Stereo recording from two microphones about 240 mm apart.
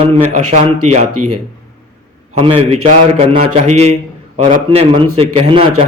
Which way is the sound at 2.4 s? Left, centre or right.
Right.